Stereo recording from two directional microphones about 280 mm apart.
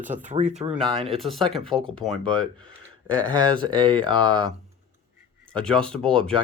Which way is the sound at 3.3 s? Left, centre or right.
Centre.